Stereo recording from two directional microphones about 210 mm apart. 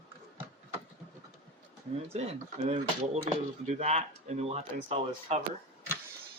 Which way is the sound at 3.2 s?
35° right (ahead or behind).